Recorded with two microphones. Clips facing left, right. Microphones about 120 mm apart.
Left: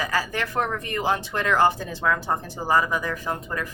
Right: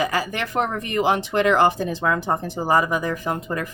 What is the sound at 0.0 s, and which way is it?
Speech, 15° right (ahead or behind).